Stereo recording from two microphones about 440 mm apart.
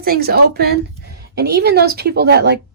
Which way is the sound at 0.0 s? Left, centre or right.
Right.